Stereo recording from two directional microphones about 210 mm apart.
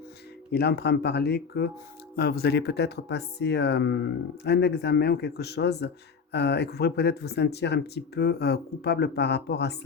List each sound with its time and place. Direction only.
0.5 s speech: 50° left (ahead or behind)